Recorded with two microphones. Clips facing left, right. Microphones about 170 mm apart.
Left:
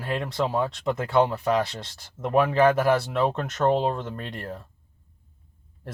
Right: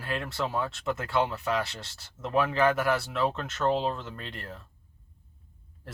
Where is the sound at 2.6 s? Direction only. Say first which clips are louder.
Left 6 dB; 25° left (ahead or behind).